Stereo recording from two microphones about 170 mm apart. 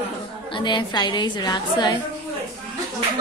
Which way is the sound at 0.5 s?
25° left (ahead or behind).